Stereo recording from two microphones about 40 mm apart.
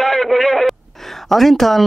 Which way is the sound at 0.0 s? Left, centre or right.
Centre.